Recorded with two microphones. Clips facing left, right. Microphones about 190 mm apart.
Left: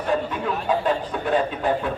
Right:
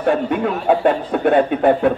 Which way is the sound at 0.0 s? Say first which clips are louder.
Right 7 dB; 60° right (ahead or behind).